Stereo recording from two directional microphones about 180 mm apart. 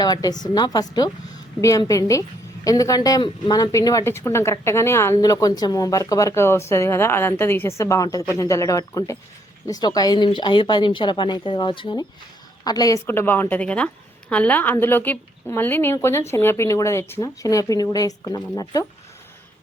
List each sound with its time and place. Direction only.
0.0 s speech: 20° left (ahead or behind)